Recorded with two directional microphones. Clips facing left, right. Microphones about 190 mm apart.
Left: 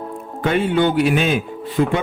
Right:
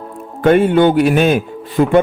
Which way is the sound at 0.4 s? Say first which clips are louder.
Right 7 dB; 50° right (ahead or behind).